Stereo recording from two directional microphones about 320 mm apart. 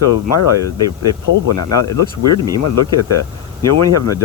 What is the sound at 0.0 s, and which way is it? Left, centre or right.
Speech, left.